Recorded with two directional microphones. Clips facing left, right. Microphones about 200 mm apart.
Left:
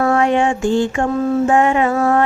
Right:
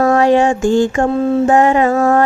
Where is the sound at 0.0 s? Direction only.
40° right (ahead or behind).